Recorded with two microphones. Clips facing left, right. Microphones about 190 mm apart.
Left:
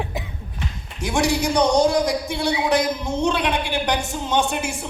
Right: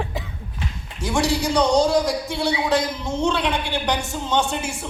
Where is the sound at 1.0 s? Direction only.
15° left (ahead or behind).